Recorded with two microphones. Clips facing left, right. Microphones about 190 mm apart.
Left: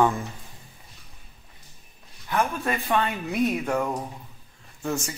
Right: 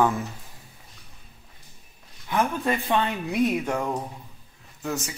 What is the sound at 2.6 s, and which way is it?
Speech, 15° right (ahead or behind).